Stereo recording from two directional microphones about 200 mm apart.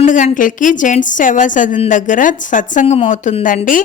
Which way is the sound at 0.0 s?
40° left (ahead or behind).